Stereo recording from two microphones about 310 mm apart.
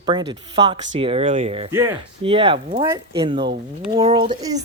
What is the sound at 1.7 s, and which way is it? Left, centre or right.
Speech, centre.